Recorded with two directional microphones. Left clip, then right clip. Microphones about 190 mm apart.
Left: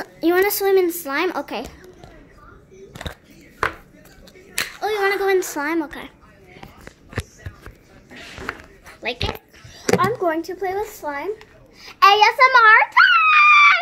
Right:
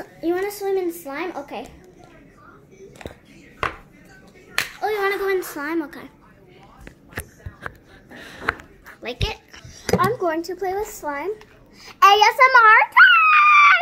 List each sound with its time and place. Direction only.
0.0 s speech: 40° left (ahead or behind)
4.7 s a woman's voice: 10° left (ahead or behind)
5.9 s speech: 5° right (ahead or behind)
9.0 s speech: 5° right (ahead or behind)
11.1 s a sound: 10° right (ahead or behind)
12.2 s screaming: 15° right (ahead or behind)